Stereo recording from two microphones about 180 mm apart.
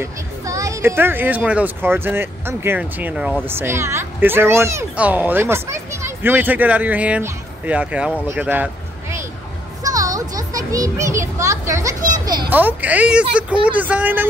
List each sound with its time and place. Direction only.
0.0 s speech: 15° right (ahead or behind)
9.8 s music: 20° right (ahead or behind)
12.1 s a sound: 25° right (ahead or behind)
12.4 s speech: 10° right (ahead or behind)